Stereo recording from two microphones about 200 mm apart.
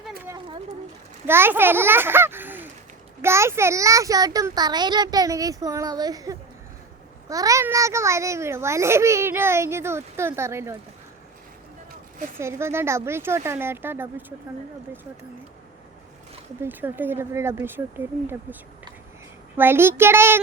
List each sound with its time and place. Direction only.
1.3 s a child's voice: 10° right (ahead or behind)
12.4 s a child's voice: 15° right (ahead or behind)
16.6 s a child's voice: 10° right (ahead or behind)
19.5 s a child's voice: 10° right (ahead or behind)